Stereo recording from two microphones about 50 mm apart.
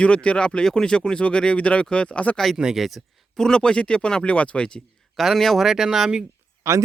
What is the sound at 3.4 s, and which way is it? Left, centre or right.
Speech, centre.